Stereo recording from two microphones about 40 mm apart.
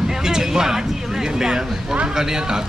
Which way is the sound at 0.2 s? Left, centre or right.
Centre.